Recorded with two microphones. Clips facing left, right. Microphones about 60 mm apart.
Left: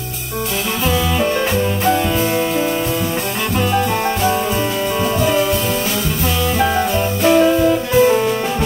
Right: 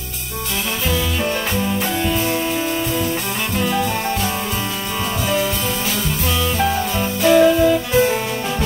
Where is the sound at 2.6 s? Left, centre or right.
Centre.